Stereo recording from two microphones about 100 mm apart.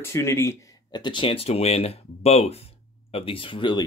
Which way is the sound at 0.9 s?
50° left (ahead or behind).